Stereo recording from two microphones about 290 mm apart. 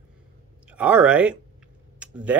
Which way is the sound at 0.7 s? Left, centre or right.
Centre.